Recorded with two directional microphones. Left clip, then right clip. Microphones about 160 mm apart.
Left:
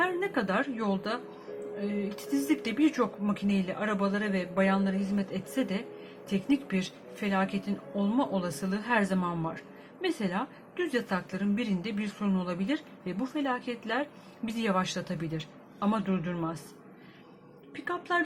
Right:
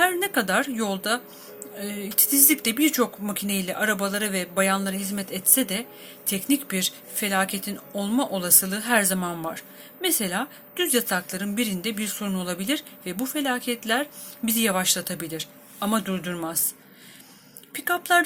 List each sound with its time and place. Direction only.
0.0 s a woman's voice: 10° right (ahead or behind)